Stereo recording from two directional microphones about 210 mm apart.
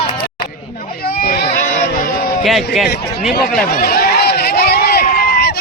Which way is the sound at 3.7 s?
45° left (ahead or behind).